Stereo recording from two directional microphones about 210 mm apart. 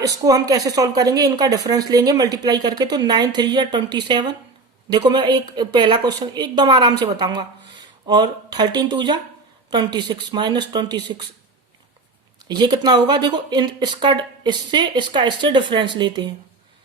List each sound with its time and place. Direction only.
0.0 s speech: 15° right (ahead or behind)
12.4 s speech: 20° right (ahead or behind)